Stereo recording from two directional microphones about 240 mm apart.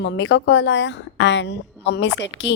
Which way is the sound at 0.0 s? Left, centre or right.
Left.